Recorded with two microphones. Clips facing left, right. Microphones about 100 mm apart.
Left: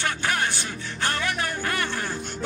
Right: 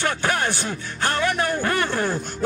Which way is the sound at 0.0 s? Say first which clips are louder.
Right 3 dB; 40° right (ahead or behind).